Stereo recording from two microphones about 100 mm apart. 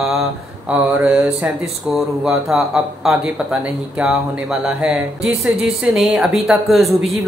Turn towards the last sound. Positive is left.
turn(degrees=0)  # may be behind; listen again after turning